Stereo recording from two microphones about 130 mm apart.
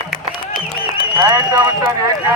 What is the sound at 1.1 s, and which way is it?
Music, 30° right (ahead or behind).